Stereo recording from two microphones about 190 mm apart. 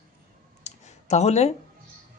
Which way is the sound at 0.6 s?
35° left (ahead or behind).